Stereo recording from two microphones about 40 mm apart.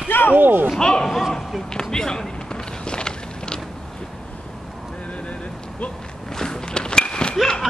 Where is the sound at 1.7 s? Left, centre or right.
Centre.